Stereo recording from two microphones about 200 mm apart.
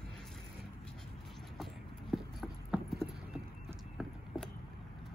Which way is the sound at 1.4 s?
Centre (ahead or behind).